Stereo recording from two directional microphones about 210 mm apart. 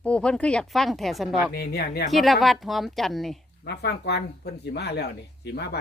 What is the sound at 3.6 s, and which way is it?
Speech, 50° left (ahead or behind).